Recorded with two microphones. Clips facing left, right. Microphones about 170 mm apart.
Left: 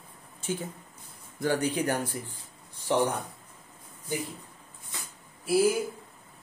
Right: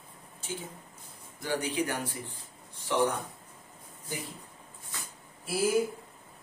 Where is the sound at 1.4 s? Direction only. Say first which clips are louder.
Left 4 dB; 50° left (ahead or behind).